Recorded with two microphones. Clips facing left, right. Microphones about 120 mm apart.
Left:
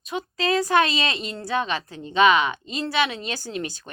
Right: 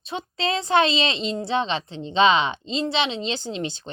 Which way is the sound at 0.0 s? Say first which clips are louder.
Left 1 dB; 30° right (ahead or behind).